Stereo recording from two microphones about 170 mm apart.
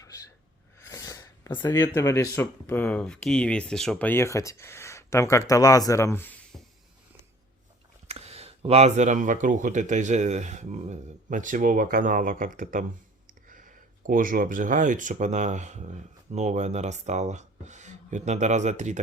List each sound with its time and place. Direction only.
0.9 s a sound: 20° left (ahead or behind)
1.9 s speech: 15° left (ahead or behind)
8.0 s speech: 35° right (ahead or behind)